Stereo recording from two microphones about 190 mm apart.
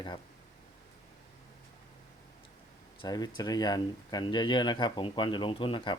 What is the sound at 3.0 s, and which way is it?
Speech, 20° left (ahead or behind).